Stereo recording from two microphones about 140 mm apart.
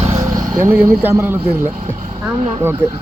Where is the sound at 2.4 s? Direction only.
55° right (ahead or behind).